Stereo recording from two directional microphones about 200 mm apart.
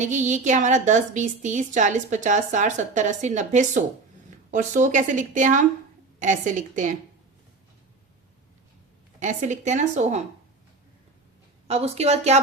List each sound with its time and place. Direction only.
0.0 s a woman's voice: 35° right (ahead or behind)
9.2 s a woman's voice: 40° right (ahead or behind)
11.7 s a woman's voice: 30° right (ahead or behind)